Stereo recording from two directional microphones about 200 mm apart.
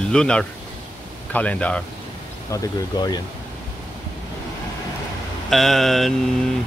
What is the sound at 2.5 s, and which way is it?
Speech, 20° left (ahead or behind).